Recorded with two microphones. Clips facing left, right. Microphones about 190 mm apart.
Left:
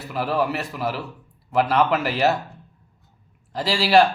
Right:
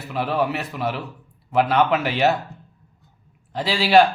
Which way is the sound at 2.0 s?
Centre (ahead or behind).